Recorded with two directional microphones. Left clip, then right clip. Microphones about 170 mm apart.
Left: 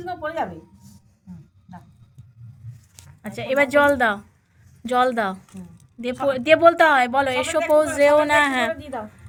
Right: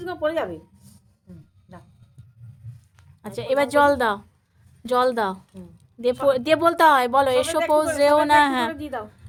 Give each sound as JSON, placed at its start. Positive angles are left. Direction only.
{"t": 0.0, "sound": "a sound", "side_deg": -50}
{"t": 3.2, "sound": "a woman's voice", "side_deg": -5}
{"t": 8.7, "sound": "a woman's voice", "side_deg": -50}